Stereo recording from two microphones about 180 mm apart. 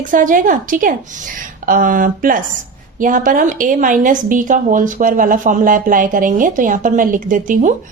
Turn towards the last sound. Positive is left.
turn(degrees=-45)  # may be behind; listen again after turning